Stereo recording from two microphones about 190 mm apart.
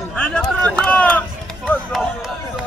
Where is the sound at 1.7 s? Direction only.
Centre (ahead or behind).